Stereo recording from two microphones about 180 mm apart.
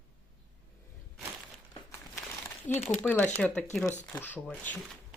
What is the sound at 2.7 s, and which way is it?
Speech, 40° left (ahead or behind).